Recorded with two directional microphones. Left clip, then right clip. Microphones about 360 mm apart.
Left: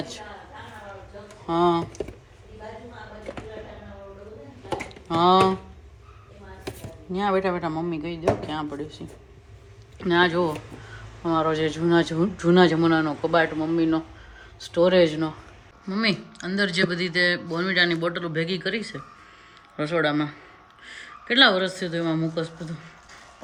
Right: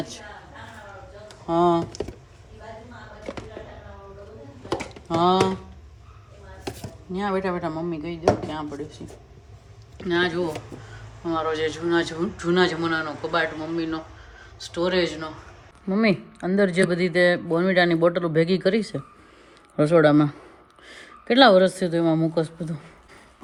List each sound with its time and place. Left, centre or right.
1.5 s speech: centre
5.0 s speech: centre
6.7 s speech: centre